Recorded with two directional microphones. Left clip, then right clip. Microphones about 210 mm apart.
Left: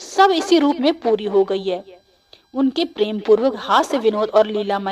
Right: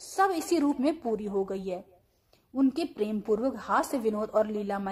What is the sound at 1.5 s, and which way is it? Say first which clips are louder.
A woman's voice: left 12 dB; 65° left (ahead or behind).